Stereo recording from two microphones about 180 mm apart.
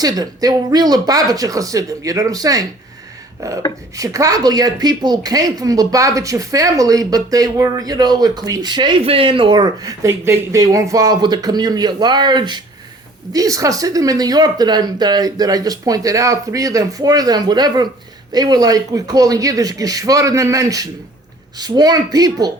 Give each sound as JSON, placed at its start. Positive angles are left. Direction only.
{"t": 0.0, "sound": "a woman's voice", "side_deg": -20}